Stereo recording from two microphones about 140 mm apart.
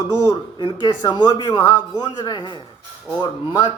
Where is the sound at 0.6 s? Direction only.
30° left (ahead or behind).